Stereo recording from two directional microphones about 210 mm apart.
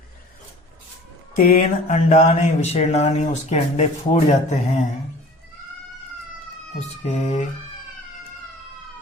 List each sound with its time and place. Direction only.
1.4 s speech: 35° left (ahead or behind)
6.7 s speech: 30° left (ahead or behind)